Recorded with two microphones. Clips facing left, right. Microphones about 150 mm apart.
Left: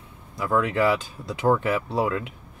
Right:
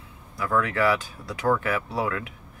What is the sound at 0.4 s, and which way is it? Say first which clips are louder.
Speech: left 2 dB; 20° left (ahead or behind).